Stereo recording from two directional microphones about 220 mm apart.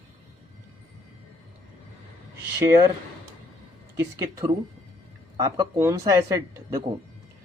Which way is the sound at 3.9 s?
15° right (ahead or behind).